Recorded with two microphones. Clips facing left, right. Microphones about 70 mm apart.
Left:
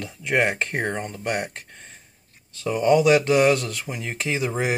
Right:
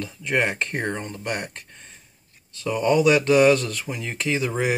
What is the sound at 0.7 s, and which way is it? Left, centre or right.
Speech, left.